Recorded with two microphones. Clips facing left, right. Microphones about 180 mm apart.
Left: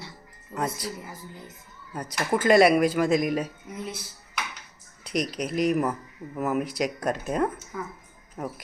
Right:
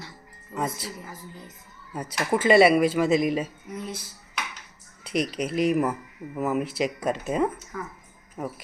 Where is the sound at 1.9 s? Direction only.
5° right (ahead or behind).